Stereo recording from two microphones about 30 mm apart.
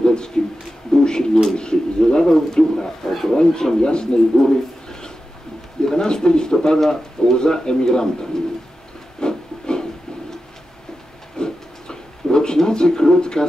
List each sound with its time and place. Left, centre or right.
0.0 s speech: left
0.9 s pigeon: left
1.5 s speech: left
6.8 s speech: centre
7.3 s speech: left
9.2 s a sound: left
11.3 s a sound: left
12.6 s speech: left